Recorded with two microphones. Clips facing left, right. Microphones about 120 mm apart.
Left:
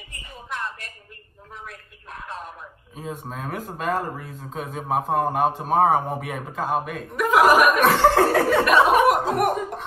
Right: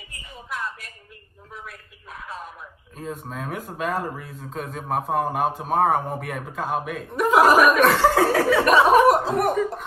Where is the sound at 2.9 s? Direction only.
Centre (ahead or behind).